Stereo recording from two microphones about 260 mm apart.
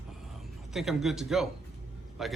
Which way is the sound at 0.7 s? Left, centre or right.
Centre.